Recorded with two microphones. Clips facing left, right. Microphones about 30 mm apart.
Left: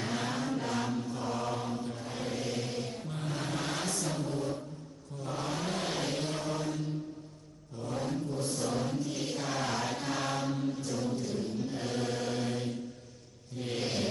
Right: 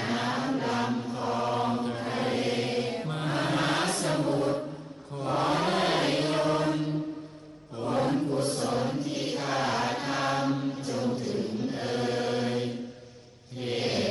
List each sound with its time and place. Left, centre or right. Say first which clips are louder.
0.0 s chant: right 5 dB; right
1.5 s mantra: right 8 dB; right
5.1 s chant: right 9 dB; right
8.6 s mantra: right 4 dB; right
13.6 s a sound: right 5 dB; right